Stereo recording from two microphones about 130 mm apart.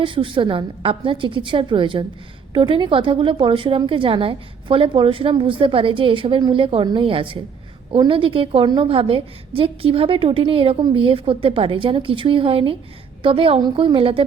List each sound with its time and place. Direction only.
0.0 s a woman's voice: 40° right (ahead or behind)